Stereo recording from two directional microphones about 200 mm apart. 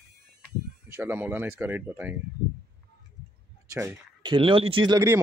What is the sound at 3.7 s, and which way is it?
Speech, 15° right (ahead or behind).